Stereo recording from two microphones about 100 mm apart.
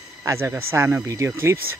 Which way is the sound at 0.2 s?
25° right (ahead or behind).